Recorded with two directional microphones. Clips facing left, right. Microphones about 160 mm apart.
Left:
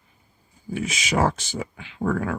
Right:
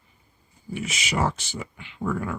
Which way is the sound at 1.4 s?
90° left.